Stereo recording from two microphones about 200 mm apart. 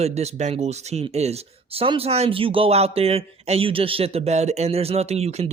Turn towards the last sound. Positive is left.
turn(degrees=-30)  # may be behind; listen again after turning